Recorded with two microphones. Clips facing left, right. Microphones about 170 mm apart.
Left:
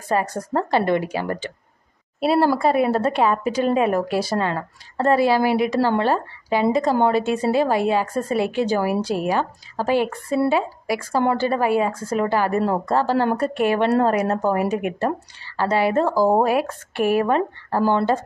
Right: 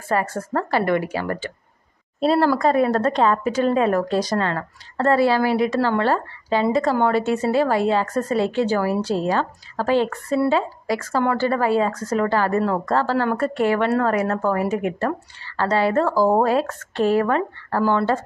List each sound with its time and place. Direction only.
0.1 s a woman's voice: 15° left (ahead or behind)
2.1 s speech: 10° left (ahead or behind)